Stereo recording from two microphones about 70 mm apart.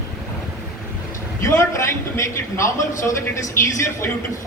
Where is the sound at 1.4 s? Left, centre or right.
Left.